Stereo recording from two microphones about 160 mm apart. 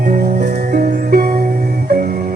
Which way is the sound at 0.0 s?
60° right (ahead or behind).